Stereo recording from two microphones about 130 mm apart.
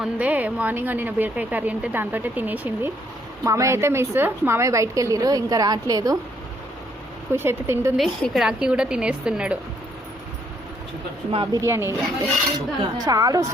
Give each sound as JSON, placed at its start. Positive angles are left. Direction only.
{"t": 0.0, "sound": "a woman's voice", "side_deg": -10}
{"t": 3.4, "sound": "a woman's voice", "side_deg": -25}
{"t": 7.3, "sound": "a woman's voice", "side_deg": -20}
{"t": 7.9, "sound": "a woman's voice", "side_deg": 0}
{"t": 11.6, "sound": "a woman's voice", "side_deg": -20}